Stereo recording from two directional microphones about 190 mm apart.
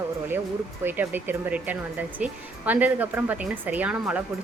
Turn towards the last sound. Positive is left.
turn(degrees=-5)  # may be behind; listen again after turning